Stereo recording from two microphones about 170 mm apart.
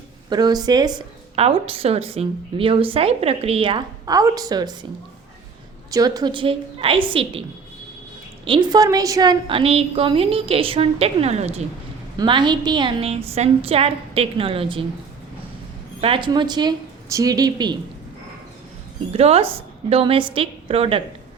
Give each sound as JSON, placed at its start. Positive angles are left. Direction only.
{"t": 0.3, "sound": "a woman's voice", "side_deg": -25}
{"t": 1.4, "sound": "a woman's voice", "side_deg": -35}
{"t": 5.9, "sound": "a woman's voice", "side_deg": -20}
{"t": 8.4, "sound": "a woman's voice", "side_deg": -25}
{"t": 12.1, "sound": "a woman's voice", "side_deg": -25}
{"t": 16.0, "sound": "a woman's voice", "side_deg": -30}
{"t": 19.1, "sound": "a woman's voice", "side_deg": -35}